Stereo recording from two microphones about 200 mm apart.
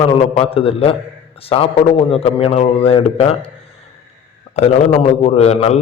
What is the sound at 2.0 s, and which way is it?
A man's voice, 30° left (ahead or behind).